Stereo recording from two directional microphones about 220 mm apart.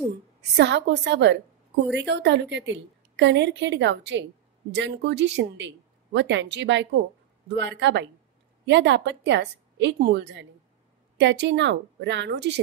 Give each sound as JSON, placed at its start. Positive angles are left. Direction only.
{"t": 0.4, "sound": "a woman's voice", "side_deg": -50}